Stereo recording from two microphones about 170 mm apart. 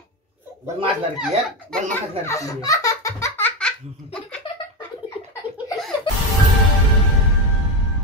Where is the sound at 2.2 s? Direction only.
20° left (ahead or behind).